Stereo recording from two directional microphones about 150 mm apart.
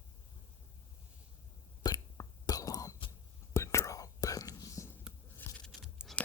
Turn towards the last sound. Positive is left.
turn(degrees=0)  # may be behind; listen again after turning